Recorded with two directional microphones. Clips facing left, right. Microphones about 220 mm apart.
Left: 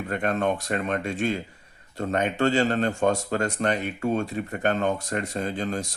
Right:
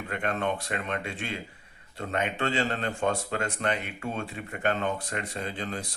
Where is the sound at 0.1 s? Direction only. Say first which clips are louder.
Left 5 dB; 40° left (ahead or behind).